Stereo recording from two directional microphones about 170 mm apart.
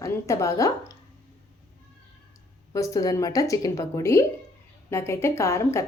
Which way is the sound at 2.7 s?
20° left (ahead or behind).